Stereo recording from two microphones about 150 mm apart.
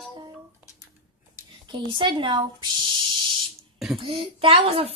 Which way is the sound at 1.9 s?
35° right (ahead or behind).